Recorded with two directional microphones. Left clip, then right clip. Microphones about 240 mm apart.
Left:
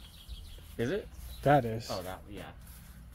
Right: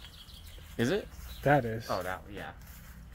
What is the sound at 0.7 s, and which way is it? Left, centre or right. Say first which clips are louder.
Speech: right 3 dB; right.